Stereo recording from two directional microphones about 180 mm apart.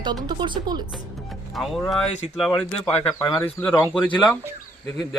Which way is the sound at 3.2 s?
15° left (ahead or behind).